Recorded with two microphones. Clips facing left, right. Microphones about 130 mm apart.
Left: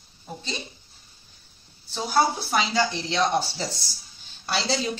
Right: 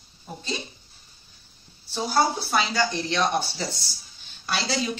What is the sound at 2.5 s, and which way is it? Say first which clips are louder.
A woman's voice: even; 20° left (ahead or behind).